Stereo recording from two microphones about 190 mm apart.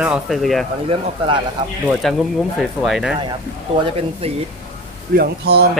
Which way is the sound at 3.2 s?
25° right (ahead or behind).